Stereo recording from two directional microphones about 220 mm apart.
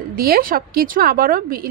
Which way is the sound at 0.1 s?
40° right (ahead or behind).